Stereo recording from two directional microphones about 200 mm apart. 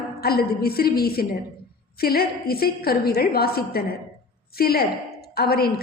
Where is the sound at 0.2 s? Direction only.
50° left (ahead or behind).